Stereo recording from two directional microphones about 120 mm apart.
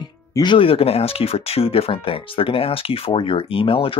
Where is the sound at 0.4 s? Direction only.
45° left (ahead or behind).